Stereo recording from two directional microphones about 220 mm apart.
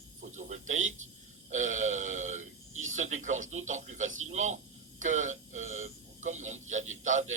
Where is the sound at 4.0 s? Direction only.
65° right (ahead or behind).